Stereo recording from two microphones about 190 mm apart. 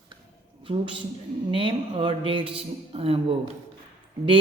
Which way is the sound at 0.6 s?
25° right (ahead or behind).